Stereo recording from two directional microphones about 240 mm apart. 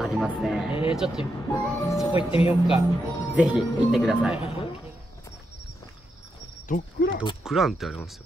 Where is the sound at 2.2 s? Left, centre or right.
Left.